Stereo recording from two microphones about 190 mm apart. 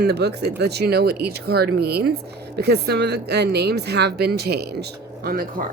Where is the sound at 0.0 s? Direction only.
60° right (ahead or behind).